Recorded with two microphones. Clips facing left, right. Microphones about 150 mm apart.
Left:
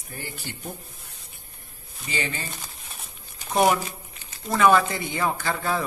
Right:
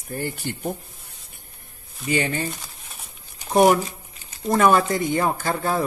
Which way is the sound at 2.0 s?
55° right (ahead or behind).